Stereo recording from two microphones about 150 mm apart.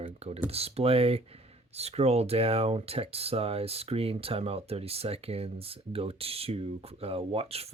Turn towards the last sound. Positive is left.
turn(degrees=-40)  # may be behind; listen again after turning